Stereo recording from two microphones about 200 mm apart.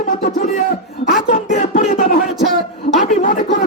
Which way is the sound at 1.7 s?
45° left (ahead or behind).